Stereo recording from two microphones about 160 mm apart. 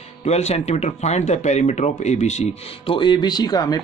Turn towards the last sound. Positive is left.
turn(degrees=25)  # may be behind; listen again after turning